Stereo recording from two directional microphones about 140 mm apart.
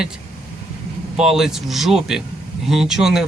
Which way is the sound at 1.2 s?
5° right (ahead or behind).